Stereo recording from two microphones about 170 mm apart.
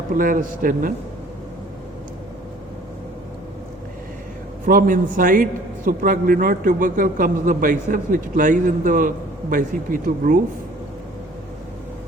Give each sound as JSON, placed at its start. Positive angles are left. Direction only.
{"t": 0.2, "sound": "a man's voice", "side_deg": -55}
{"t": 4.6, "sound": "a man's voice", "side_deg": -55}